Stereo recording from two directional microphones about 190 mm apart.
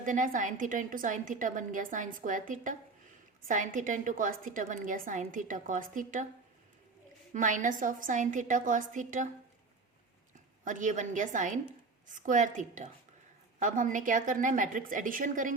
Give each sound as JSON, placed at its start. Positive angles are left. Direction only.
{"t": 0.0, "sound": "a woman's voice", "side_deg": -45}
{"t": 7.3, "sound": "a woman's voice", "side_deg": -40}
{"t": 10.6, "sound": "a woman's voice", "side_deg": -40}